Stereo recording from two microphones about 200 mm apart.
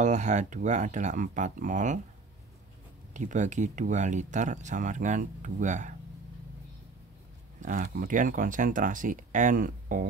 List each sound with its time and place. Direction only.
0.0 s speech: 35° right (ahead or behind)
3.1 s speech: 40° right (ahead or behind)
7.6 s speech: 40° right (ahead or behind)